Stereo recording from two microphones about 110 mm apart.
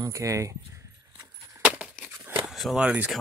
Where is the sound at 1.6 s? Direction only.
10° right (ahead or behind).